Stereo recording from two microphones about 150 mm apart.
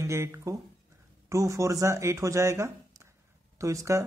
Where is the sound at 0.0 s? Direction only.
20° right (ahead or behind).